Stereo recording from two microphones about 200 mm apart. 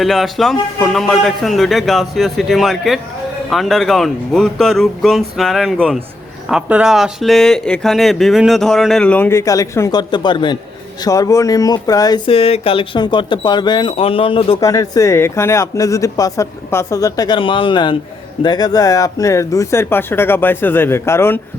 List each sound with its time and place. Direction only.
0.0 s speech: centre (ahead or behind); by 14.6 s 25° left (ahead or behind)
14.6 s speech: 15° left (ahead or behind)